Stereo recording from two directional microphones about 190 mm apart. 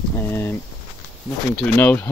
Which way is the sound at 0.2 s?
10° left (ahead or behind).